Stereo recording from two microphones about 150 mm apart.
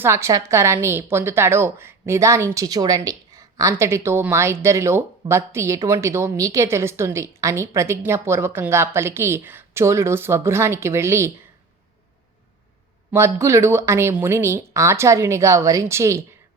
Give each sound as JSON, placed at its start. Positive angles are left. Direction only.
{"t": 0.0, "sound": "a woman's voice", "side_deg": -20}
{"t": 13.1, "sound": "a woman's voice", "side_deg": -15}